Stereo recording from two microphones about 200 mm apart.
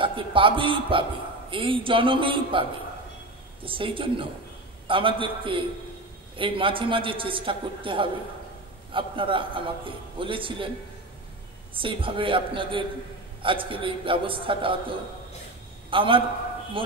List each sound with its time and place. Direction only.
0.0 s a man's voice: 25° right (ahead or behind)
3.6 s a man's voice: 25° right (ahead or behind)
11.7 s a man's voice: 25° right (ahead or behind)